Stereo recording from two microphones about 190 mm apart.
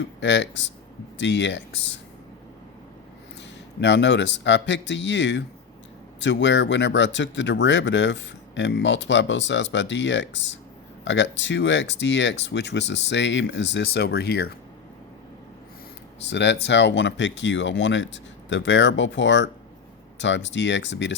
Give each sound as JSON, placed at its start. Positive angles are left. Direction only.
{"t": 0.2, "sound": "speech", "side_deg": 70}
{"t": 3.8, "sound": "speech", "side_deg": 70}
{"t": 16.2, "sound": "speech", "side_deg": 65}